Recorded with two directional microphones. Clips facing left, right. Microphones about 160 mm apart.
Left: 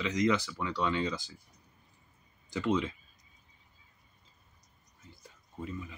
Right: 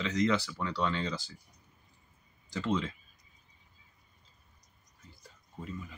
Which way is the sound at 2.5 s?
15° left (ahead or behind).